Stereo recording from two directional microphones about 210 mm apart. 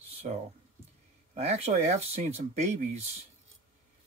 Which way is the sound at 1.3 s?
30° right (ahead or behind).